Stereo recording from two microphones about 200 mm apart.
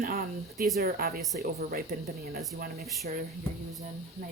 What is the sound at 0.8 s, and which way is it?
Speech, 50° right (ahead or behind).